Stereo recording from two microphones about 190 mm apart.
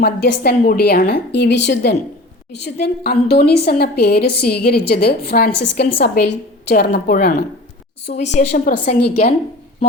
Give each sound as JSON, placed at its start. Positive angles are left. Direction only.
{"t": 0.0, "sound": "a woman's voice", "side_deg": 55}
{"t": 2.8, "sound": "a woman's voice", "side_deg": 55}
{"t": 8.1, "sound": "a woman's voice", "side_deg": 40}
{"t": 8.9, "sound": "a woman's voice", "side_deg": 35}